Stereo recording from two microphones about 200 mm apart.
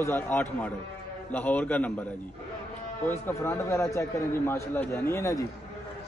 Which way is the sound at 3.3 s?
15° left (ahead or behind).